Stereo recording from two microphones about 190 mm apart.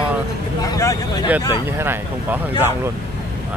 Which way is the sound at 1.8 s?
10° right (ahead or behind).